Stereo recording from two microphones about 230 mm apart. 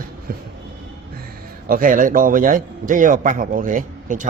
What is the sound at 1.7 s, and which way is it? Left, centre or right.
A man's voice, right.